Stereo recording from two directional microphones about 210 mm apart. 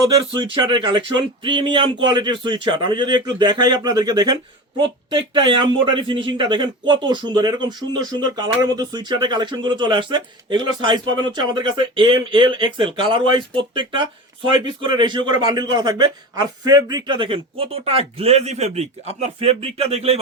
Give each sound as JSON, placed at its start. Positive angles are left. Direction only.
{"t": 0.3, "sound": "a man's voice", "side_deg": -20}